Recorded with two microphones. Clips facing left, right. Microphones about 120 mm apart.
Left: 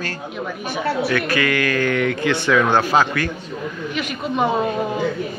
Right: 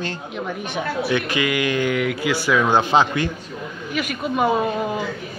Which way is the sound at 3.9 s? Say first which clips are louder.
Right 2 dB; 5° right (ahead or behind).